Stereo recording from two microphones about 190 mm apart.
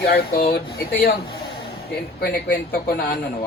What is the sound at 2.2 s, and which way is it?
Speech, 55° left (ahead or behind).